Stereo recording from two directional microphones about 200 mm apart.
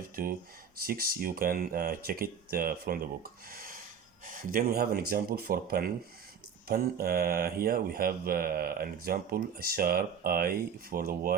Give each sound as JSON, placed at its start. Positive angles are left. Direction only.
{"t": 0.2, "sound": "speech", "side_deg": -50}
{"t": 3.5, "sound": "rub", "side_deg": -45}
{"t": 4.3, "sound": "speech", "side_deg": -45}